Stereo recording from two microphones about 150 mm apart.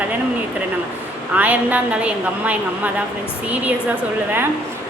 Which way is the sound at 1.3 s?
10° right (ahead or behind).